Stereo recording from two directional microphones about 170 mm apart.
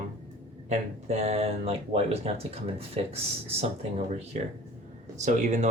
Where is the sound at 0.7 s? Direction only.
40° right (ahead or behind).